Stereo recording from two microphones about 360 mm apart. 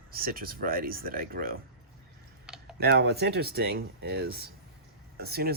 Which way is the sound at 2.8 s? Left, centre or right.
Right.